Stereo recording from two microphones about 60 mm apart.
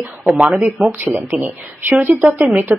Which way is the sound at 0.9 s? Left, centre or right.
Right.